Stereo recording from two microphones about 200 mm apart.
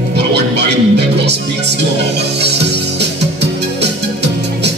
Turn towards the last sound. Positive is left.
turn(degrees=-55)  # may be behind; listen again after turning